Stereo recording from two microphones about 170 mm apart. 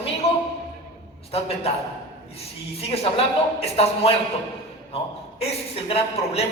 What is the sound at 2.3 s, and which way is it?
A man's voice, 35° left (ahead or behind).